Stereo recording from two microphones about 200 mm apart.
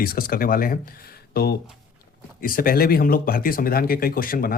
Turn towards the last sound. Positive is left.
turn(degrees=45)  # may be behind; listen again after turning